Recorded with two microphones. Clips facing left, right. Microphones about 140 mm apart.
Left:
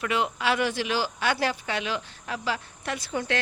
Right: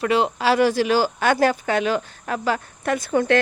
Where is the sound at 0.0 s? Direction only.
35° right (ahead or behind).